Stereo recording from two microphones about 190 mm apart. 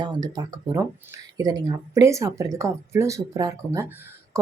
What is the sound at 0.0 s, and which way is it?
Speech, 20° right (ahead or behind).